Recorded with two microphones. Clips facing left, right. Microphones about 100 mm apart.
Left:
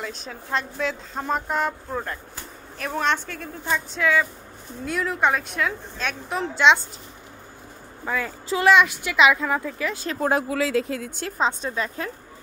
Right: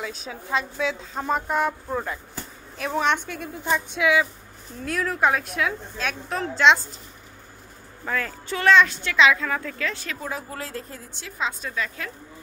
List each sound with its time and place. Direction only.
0.0 s a woman's voice: 5° right (ahead or behind)
8.0 s a woman's voice: 10° left (ahead or behind)
10.2 s speech: 80° left
11.1 s a woman's voice: 45° left (ahead or behind)